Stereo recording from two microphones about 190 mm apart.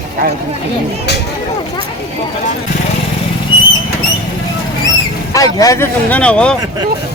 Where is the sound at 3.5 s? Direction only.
30° left (ahead or behind).